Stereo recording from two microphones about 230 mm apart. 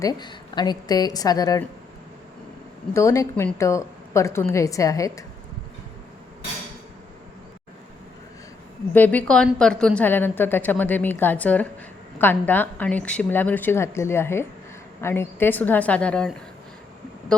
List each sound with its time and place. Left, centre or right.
0.0 s a woman's voice: centre
2.9 s a woman's voice: centre
8.9 s a woman's voice: centre